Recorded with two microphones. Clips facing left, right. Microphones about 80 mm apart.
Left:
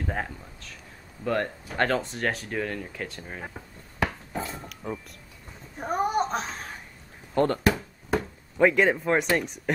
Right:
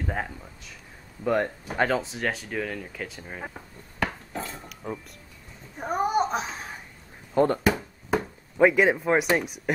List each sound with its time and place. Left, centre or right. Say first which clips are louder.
0.0 s a child's voice: even; centre
7.3 s chop: right 1 dB; centre
9.3 s speech: right 1 dB; centre